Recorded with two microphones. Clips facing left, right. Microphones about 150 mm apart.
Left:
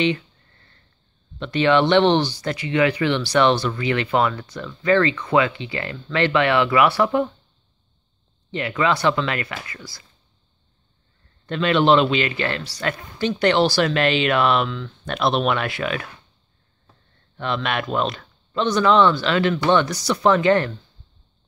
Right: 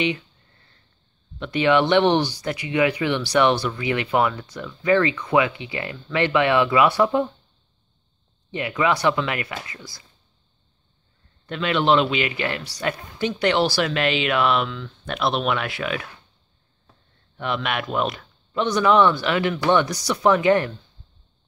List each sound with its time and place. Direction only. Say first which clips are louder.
1.4 s speech: left 1 dB; 10° right (ahead or behind)
8.5 s speech: left 1 dB; 15° right (ahead or behind)
11.4 s speech: left 3 dB; 5° right (ahead or behind)
17.4 s speech: left 1 dB; 10° right (ahead or behind)